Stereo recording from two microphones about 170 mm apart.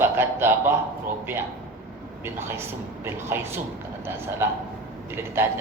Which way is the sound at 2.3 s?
15° right (ahead or behind).